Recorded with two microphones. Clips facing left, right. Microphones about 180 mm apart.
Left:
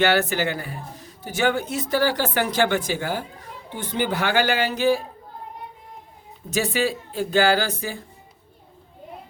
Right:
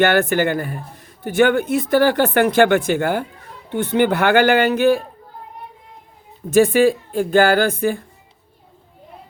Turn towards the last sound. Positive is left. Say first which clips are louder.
# right 6 dB
turn(degrees=-55)  # may be behind; listen again after turning